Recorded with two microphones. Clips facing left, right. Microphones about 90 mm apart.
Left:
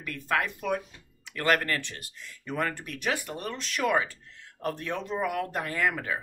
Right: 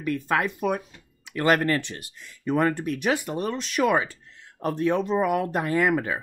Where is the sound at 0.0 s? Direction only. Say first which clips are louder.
Right 5 dB; 20° right (ahead or behind).